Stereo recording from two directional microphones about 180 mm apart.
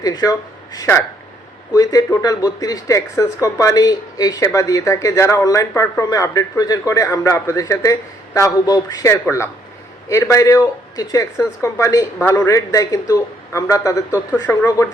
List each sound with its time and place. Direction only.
0.2 s speech: 20° left (ahead or behind)